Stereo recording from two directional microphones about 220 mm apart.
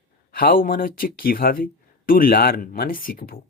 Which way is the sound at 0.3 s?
40° left (ahead or behind).